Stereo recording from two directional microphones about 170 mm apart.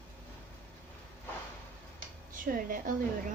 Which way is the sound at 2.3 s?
55° right (ahead or behind).